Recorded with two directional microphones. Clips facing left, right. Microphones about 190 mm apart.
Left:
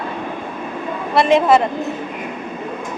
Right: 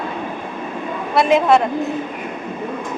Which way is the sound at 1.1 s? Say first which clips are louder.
Left 1 dB; centre (ahead or behind).